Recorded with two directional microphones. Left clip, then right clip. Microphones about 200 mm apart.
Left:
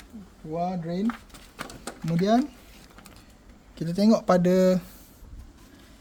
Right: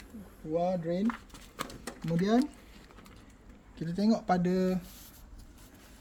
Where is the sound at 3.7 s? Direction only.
60° left (ahead or behind).